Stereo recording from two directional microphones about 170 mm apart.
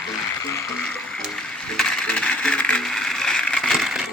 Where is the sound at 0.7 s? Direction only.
5° left (ahead or behind).